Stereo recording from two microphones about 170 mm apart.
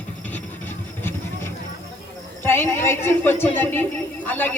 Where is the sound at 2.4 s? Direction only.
15° left (ahead or behind).